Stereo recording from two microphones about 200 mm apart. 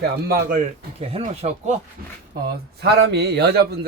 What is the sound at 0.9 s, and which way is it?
Speech, 30° right (ahead or behind).